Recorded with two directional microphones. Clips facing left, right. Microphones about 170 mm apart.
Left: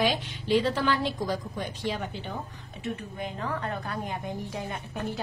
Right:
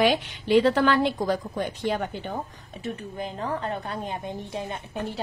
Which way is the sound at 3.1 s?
30° right (ahead or behind).